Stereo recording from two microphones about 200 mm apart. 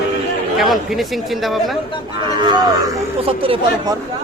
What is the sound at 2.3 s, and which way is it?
Speech, 20° right (ahead or behind).